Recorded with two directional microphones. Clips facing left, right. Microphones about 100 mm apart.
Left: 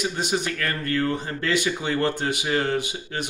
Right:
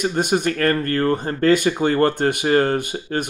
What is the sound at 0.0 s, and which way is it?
Speech, 50° right (ahead or behind).